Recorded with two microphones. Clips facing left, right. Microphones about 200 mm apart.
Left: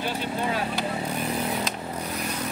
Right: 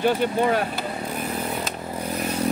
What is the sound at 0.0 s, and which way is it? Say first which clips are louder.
Speech: right 8 dB; 55° right (ahead or behind).